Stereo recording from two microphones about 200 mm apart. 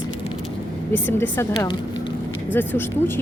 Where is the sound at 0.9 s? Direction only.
10° left (ahead or behind).